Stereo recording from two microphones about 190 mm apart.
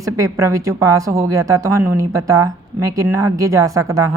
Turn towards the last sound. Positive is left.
turn(degrees=-15)  # may be behind; listen again after turning